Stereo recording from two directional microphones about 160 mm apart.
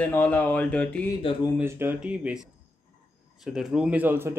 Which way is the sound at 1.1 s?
25° left (ahead or behind).